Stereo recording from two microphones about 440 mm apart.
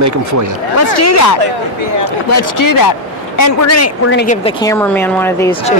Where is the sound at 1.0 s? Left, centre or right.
Left.